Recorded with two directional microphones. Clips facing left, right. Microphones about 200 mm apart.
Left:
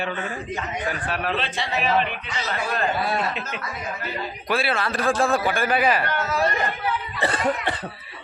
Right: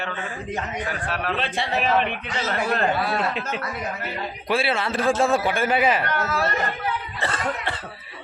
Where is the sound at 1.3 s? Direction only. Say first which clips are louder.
Right 1 dB; 55° right (ahead or behind).